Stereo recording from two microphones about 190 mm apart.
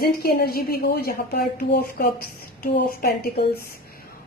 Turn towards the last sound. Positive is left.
turn(degrees=50)  # may be behind; listen again after turning